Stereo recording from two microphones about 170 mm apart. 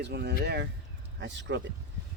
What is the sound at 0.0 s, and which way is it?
Speech, 75° right (ahead or behind).